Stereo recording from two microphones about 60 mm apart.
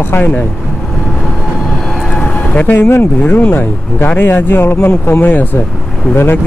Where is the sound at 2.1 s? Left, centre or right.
Centre.